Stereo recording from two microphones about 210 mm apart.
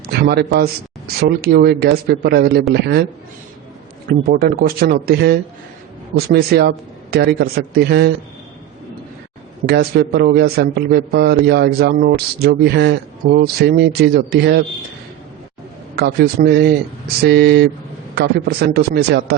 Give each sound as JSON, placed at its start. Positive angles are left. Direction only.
{"t": 0.1, "sound": "a man's voice", "side_deg": -50}
{"t": 4.3, "sound": "a man's voice", "side_deg": -50}
{"t": 9.6, "sound": "a man's voice", "side_deg": -50}
{"t": 16.0, "sound": "a man's voice", "side_deg": -45}